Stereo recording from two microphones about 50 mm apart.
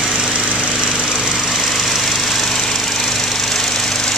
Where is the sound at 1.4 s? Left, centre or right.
Centre.